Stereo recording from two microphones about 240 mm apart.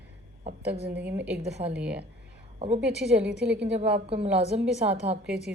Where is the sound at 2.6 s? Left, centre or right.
Right.